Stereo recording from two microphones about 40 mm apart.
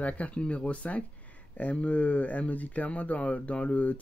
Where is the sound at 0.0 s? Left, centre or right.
Left.